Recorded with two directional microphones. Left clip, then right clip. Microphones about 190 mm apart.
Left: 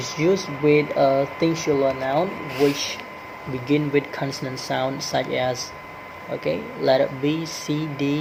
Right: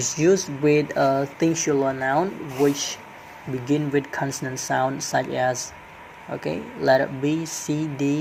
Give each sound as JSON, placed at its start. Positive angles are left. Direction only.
{"t": 0.0, "sound": "speech", "side_deg": -35}
{"t": 3.7, "sound": "speech", "side_deg": -35}